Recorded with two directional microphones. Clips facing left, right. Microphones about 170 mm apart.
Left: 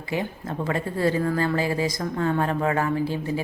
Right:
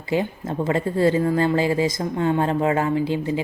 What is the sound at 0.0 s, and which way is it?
Speech, 25° right (ahead or behind).